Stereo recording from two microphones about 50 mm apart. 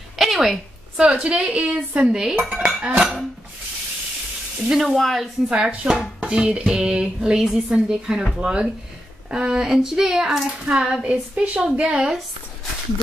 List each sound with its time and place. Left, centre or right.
0.2 s a sound: centre
0.9 s dishes: centre
3.0 s dishes: centre
4.6 s speech: centre
5.5 s dishes: right
7.4 s speech: centre
11.1 s dishes: right